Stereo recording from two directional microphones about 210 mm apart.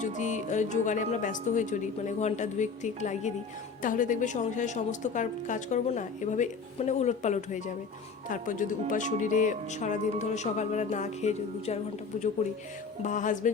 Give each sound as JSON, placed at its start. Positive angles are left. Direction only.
{"t": 0.0, "sound": "a woman's voice", "side_deg": 35}